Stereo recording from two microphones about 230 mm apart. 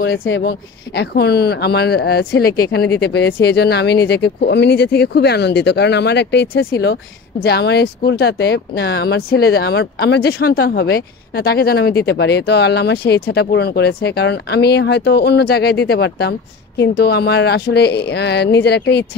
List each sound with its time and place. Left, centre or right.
0.0 s speech: left